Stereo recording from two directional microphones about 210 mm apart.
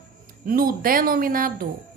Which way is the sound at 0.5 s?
45° right (ahead or behind).